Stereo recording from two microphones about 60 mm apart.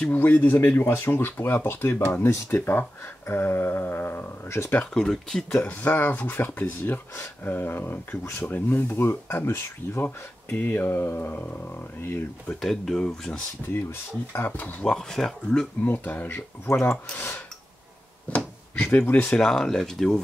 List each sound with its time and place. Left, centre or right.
0.1 s speech: left
4.5 s speech: left
4.9 s speech: centre
5.6 s speech: left
8.2 s speech: left
8.5 s speech: left
12.6 s speech: centre
14.3 s speech: left
14.9 s speech: centre
15.8 s speech: left
18.9 s speech: left
19.2 s speech: centre